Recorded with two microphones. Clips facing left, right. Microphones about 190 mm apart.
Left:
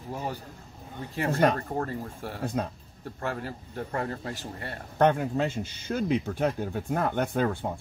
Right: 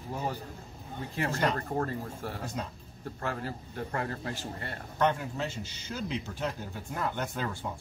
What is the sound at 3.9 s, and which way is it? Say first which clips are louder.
Speech: left 3 dB; 25° left (ahead or behind).